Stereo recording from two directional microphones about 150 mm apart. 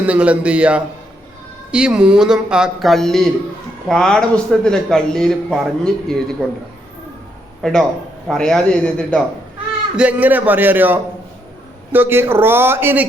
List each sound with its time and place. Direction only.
0.0 s a man's voice: 10° right (ahead or behind)
7.6 s a man's voice: 5° left (ahead or behind)
9.9 s a man's voice: 10° right (ahead or behind)